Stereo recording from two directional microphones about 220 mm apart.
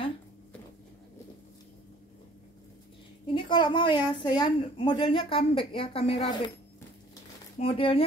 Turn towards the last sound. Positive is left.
turn(degrees=25)  # may be behind; listen again after turning